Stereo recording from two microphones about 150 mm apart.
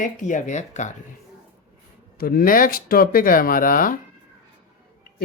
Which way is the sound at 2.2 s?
80° left.